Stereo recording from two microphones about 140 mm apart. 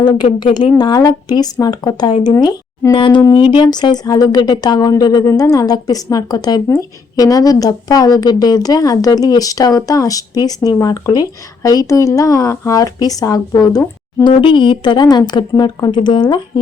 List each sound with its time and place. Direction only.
0.2 s speech: 55° left (ahead or behind)
0.8 s speech: 30° left (ahead or behind)
14.4 s a woman's voice: 35° left (ahead or behind)